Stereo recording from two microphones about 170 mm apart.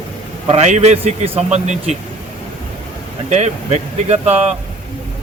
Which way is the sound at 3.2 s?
40° right (ahead or behind).